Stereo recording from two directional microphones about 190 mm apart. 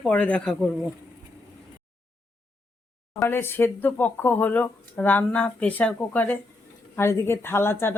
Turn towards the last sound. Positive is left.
turn(degrees=10)  # may be behind; listen again after turning